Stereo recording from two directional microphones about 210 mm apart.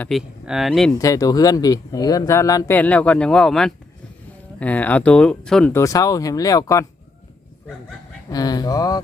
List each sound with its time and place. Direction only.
0.0 s speech: centre (ahead or behind)
0.9 s speech: 15° left (ahead or behind)
8.3 s speech: 20° left (ahead or behind)